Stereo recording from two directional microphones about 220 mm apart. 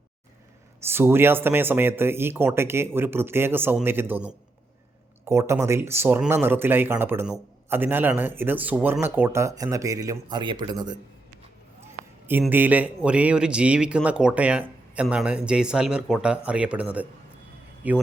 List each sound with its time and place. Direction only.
0.8 s speech: 10° right (ahead or behind)
12.3 s a man's voice: 10° right (ahead or behind)